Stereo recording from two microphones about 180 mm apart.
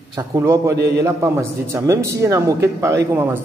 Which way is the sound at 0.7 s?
65° right (ahead or behind).